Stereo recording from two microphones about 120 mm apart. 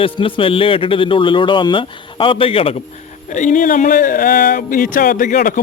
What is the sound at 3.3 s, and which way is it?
Speech, 90° left.